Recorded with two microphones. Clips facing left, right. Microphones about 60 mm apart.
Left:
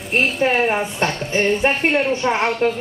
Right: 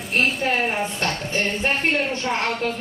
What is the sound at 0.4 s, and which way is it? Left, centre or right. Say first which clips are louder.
Speech: left 5 dB; left.